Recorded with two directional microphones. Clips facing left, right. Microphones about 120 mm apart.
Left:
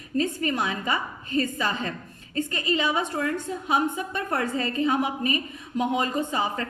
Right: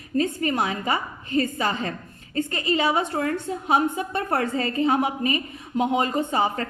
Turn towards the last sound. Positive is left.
turn(degrees=-30)  # may be behind; listen again after turning